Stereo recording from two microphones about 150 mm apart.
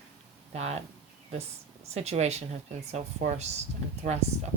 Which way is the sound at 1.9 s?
45° right (ahead or behind).